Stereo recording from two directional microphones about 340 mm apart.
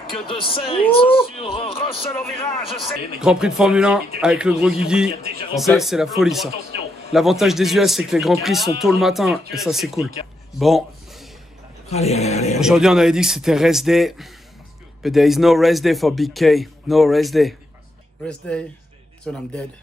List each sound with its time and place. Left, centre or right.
0.3 s speech: centre
2.7 s speech: centre
10.6 s a sound: centre
11.9 s speech: centre
12.5 s speech: centre